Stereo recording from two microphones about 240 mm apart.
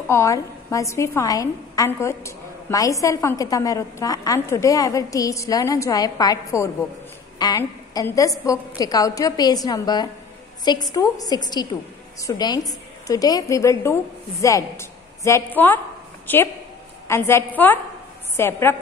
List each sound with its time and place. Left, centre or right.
0.1 s a woman's voice: centre